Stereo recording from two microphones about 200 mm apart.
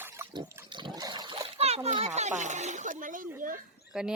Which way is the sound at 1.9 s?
35° right (ahead or behind).